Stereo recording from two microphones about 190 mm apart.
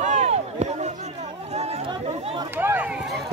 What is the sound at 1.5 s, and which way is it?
Chatter, 35° right (ahead or behind).